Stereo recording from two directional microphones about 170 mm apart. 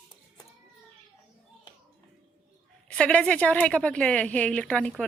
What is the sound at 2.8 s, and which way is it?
A woman's voice, 5° left (ahead or behind).